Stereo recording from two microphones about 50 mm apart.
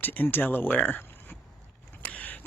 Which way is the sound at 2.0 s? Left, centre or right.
Left.